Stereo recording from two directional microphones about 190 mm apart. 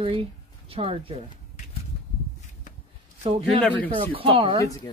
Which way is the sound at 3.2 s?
35° right (ahead or behind).